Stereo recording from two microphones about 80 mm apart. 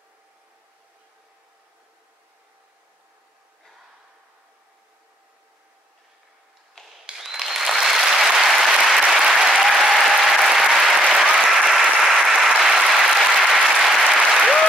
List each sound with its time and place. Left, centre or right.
7.1 s applause: centre